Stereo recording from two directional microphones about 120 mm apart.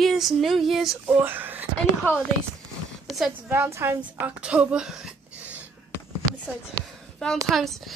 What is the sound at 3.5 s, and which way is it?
A woman's voice, 20° right (ahead or behind).